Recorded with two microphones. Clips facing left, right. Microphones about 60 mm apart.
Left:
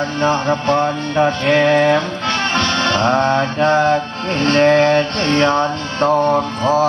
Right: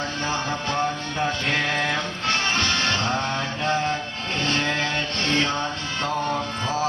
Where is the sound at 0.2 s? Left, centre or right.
Left.